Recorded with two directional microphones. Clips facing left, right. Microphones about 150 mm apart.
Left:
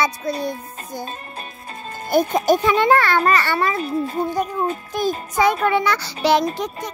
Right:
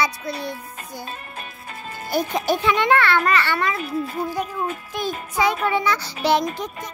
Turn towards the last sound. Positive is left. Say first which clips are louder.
# left 4 dB
turn(degrees=90)